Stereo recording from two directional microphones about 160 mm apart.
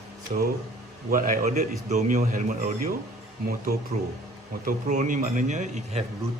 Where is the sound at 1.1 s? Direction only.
60° right (ahead or behind).